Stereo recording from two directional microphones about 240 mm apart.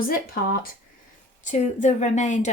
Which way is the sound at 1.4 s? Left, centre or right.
Left.